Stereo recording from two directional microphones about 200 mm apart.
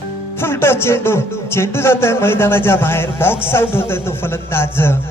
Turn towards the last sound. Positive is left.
turn(degrees=10)  # may be behind; listen again after turning